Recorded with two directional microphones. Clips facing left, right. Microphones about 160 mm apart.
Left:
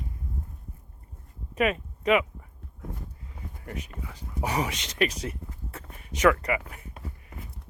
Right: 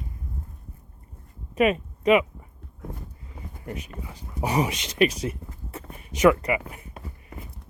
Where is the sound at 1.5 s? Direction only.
20° right (ahead or behind).